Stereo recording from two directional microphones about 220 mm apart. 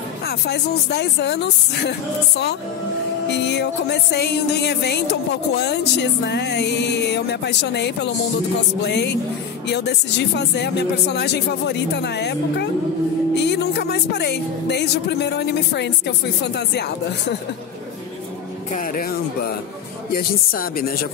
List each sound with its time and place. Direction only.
0.3 s speech: 50° left (ahead or behind)
18.7 s speech: 40° left (ahead or behind)